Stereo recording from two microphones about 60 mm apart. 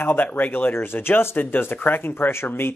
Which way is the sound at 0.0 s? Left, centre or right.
Left.